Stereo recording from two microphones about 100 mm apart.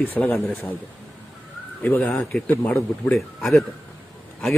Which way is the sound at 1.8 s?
15° left (ahead or behind).